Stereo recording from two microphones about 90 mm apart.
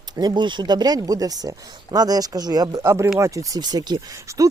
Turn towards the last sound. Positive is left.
turn(degrees=-35)  # may be behind; listen again after turning